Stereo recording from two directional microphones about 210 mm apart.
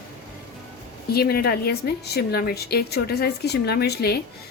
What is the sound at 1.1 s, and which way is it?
A woman's voice, 45° left (ahead or behind).